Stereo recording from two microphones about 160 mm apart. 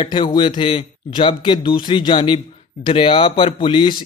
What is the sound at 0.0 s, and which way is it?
Speech, 30° left (ahead or behind).